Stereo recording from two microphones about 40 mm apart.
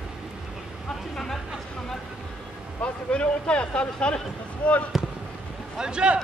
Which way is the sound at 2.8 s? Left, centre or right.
Left.